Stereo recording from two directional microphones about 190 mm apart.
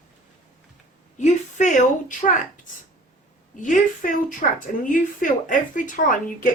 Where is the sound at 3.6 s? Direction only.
45° left (ahead or behind).